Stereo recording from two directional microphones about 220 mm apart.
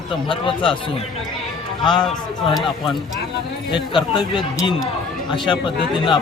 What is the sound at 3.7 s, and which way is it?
Speech, 20° left (ahead or behind).